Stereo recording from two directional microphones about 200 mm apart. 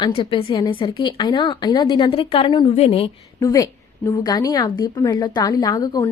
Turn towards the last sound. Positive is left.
turn(degrees=20)  # may be behind; listen again after turning